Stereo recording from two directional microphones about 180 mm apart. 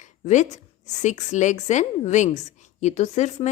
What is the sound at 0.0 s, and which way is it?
A woman's voice, 40° left (ahead or behind).